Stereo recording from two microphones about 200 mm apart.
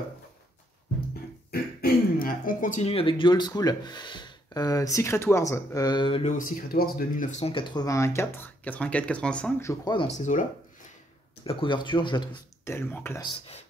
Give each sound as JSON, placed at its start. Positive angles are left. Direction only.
{"t": 1.5, "sound": "speech", "side_deg": 50}
{"t": 6.2, "sound": "speech", "side_deg": 45}
{"t": 10.0, "sound": "speech", "side_deg": 35}
{"t": 11.4, "sound": "speech", "side_deg": 25}
{"t": 12.7, "sound": "speech", "side_deg": 10}
{"t": 13.2, "sound": "speech", "side_deg": 25}